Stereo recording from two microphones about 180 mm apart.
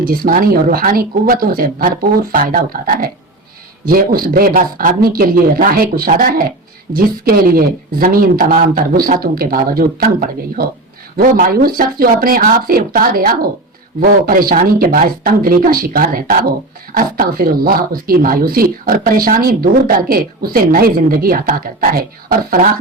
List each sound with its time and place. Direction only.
0.0 s speech: 50° right (ahead or behind)